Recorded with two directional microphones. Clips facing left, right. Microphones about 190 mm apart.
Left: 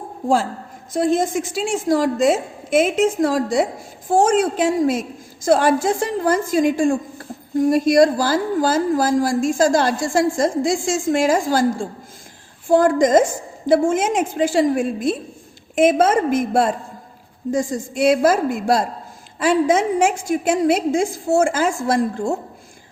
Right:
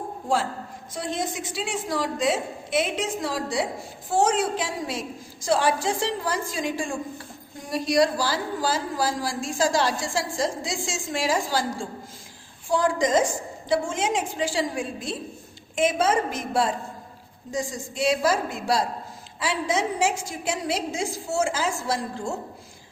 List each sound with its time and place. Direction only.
0.9 s a woman's voice: 50° left (ahead or behind)